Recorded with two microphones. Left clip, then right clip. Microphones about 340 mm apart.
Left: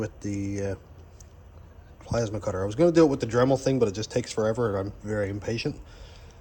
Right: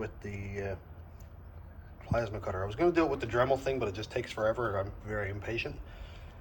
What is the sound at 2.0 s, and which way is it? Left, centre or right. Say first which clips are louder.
Speech: left 5 dB; left.